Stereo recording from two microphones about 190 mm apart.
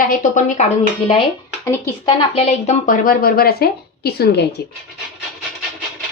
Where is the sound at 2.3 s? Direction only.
35° left (ahead or behind); by 4.5 s 60° left (ahead or behind).